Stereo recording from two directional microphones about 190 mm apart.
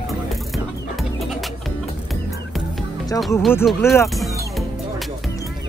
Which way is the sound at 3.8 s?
15° left (ahead or behind).